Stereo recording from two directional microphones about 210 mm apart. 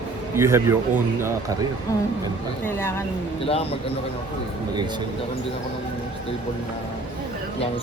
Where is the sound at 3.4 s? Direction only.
30° left (ahead or behind).